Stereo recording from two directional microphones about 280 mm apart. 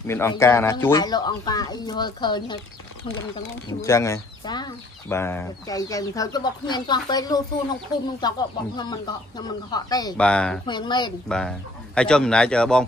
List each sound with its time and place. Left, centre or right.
0.0 s speech: centre
3.8 s speech: centre
10.7 s speech: centre
11.2 s speech: centre